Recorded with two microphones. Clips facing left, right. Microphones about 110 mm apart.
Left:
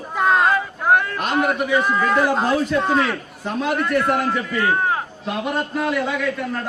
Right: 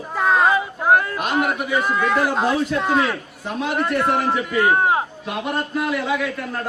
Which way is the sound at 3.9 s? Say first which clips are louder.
Right 1 dB; 10° right (ahead or behind).